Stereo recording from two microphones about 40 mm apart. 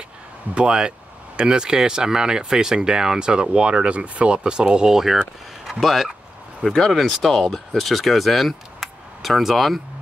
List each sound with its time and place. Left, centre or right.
0.6 s speech: right; by 9.8 s centre